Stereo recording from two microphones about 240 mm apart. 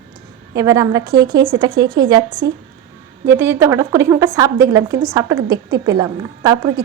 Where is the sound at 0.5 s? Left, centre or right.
Centre.